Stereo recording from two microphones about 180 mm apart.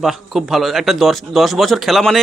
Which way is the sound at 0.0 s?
Centre (ahead or behind).